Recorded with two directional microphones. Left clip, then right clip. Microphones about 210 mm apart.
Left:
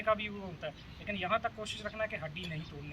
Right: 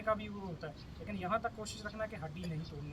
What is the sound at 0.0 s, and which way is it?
Speech, centre (ahead or behind).